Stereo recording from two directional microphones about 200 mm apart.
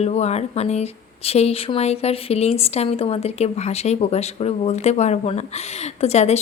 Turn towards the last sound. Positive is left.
turn(degrees=35)  # may be behind; listen again after turning